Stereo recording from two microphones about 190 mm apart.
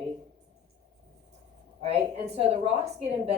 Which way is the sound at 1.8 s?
35° right (ahead or behind).